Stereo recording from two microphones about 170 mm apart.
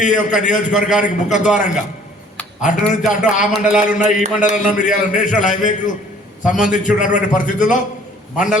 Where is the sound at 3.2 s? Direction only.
45° left (ahead or behind).